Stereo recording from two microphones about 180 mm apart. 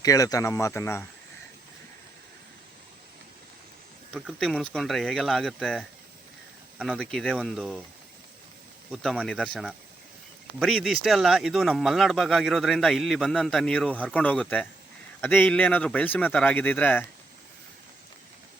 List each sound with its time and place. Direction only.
0.0 s speech: 20° left (ahead or behind)
4.1 s speech: centre (ahead or behind)
8.9 s speech: centre (ahead or behind)